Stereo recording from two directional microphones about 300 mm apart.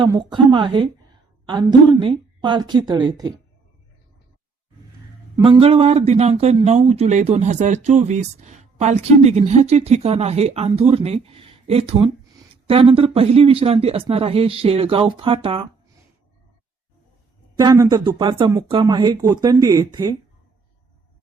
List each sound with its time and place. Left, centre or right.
0.0 s speech: centre
5.4 s speech: centre
17.6 s speech: centre